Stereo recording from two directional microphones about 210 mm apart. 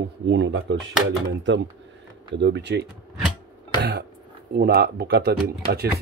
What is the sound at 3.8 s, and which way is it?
Throat clearing, 55° right (ahead or behind).